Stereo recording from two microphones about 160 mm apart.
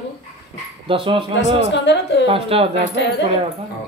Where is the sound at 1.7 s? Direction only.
90° left.